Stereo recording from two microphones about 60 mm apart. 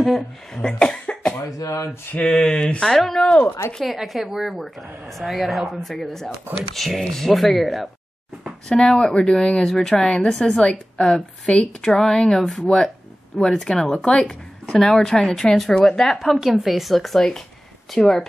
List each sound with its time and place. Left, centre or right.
0.0 s speech: centre
0.7 s cough: centre
1.6 s speech: left
2.1 s speech: centre
3.7 s speech: centre
8.6 s speech: centre